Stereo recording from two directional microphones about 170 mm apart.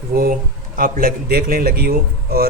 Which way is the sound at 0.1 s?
60° right (ahead or behind).